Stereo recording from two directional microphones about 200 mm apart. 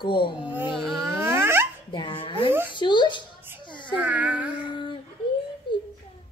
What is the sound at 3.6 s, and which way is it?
Baby cry, 25° left (ahead or behind).